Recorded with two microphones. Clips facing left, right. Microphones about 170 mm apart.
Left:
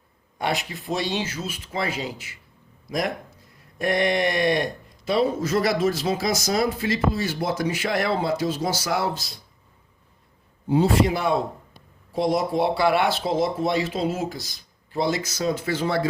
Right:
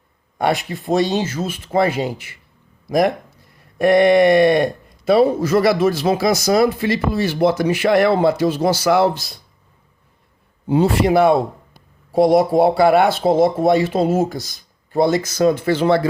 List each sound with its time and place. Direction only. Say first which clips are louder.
0.3 s speech: right 7 dB; 55° right (ahead or behind)
3.8 s speech: right 10 dB; 60° right (ahead or behind)
10.7 s speech: right 4 dB; 70° right (ahead or behind)